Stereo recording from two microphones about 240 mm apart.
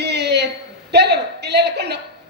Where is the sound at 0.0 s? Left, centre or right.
Right.